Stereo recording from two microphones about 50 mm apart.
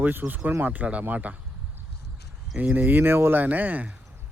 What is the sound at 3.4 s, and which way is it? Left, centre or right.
Speech, right.